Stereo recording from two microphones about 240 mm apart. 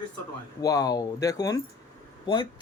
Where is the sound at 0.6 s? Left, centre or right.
Centre.